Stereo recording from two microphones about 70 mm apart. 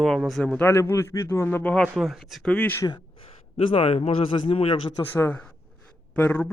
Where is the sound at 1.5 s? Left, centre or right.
Left.